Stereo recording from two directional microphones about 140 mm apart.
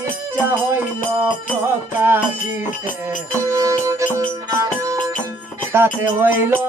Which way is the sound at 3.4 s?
20° right (ahead or behind).